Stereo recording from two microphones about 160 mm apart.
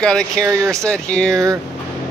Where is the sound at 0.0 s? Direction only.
5° left (ahead or behind).